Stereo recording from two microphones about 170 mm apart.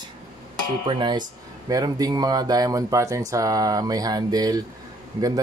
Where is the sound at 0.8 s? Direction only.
25° right (ahead or behind).